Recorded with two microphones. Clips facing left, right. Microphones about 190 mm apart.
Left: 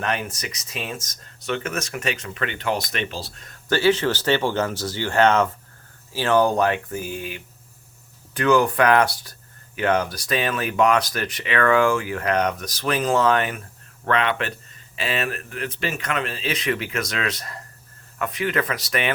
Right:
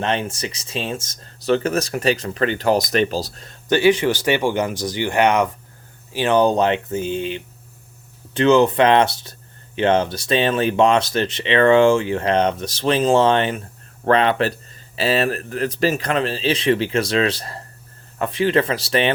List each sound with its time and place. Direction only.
0.0 s speech: 25° right (ahead or behind)
3.7 s speech: 15° right (ahead or behind)